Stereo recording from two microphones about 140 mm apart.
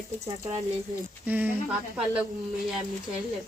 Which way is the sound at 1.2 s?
10° right (ahead or behind).